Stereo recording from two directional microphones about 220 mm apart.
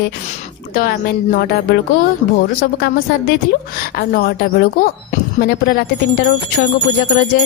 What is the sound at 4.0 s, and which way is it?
A woman's voice, 45° left (ahead or behind).